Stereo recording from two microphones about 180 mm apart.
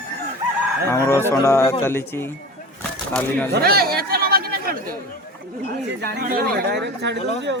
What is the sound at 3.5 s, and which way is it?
Speech, 60° right (ahead or behind).